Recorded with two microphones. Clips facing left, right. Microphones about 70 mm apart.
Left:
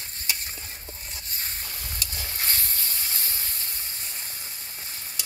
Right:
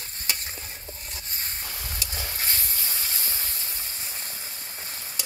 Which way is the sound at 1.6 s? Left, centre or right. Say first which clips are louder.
Right 1 dB; centre.